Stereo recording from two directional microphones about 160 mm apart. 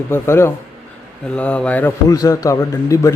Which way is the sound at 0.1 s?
15° left (ahead or behind).